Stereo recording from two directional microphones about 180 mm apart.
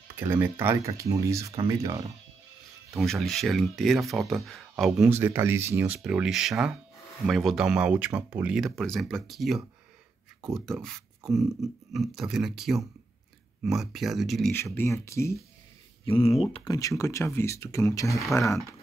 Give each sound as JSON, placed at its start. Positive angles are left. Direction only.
{"t": 0.1, "sound": "speech", "side_deg": -10}
{"t": 3.0, "sound": "speech", "side_deg": 0}
{"t": 14.5, "sound": "speech", "side_deg": 15}
{"t": 16.1, "sound": "speech", "side_deg": 35}
{"t": 16.7, "sound": "speech", "side_deg": 15}